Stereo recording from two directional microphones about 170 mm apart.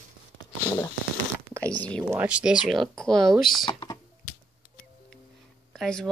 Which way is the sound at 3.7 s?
30° left (ahead or behind).